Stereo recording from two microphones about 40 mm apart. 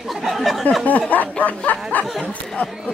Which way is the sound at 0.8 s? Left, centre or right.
Left.